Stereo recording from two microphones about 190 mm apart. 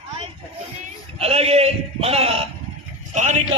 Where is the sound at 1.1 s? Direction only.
30° right (ahead or behind).